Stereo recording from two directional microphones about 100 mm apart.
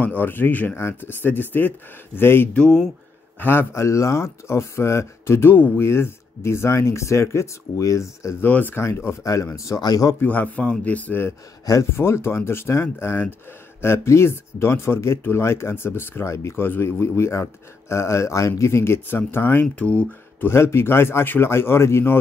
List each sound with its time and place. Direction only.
0.0 s speech: 20° left (ahead or behind)
2.5 s a man's voice: 10° left (ahead or behind)
3.3 s speech: 20° left (ahead or behind)
8.5 s speech: 20° left (ahead or behind); by 10.1 s 40° left (ahead or behind)
10.2 s a man's voice: 15° left (ahead or behind)
11.6 s speech: 30° left (ahead or behind)